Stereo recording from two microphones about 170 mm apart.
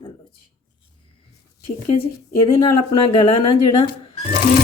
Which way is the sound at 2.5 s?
30° left (ahead or behind).